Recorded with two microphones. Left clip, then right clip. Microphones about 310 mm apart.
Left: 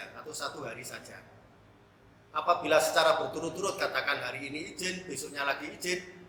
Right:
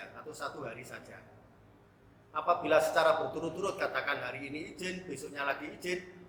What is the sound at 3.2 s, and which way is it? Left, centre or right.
Speech, right.